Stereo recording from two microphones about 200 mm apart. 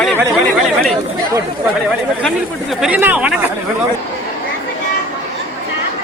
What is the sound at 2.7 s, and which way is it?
Speech, 5° right (ahead or behind).